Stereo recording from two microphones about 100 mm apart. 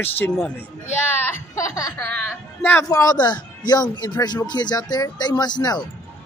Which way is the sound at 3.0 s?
40° left (ahead or behind).